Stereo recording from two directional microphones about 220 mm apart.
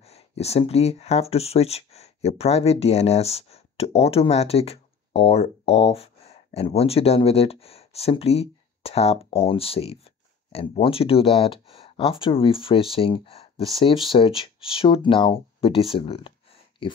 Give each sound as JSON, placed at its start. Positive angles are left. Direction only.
{"t": 0.0, "sound": "speech", "side_deg": 30}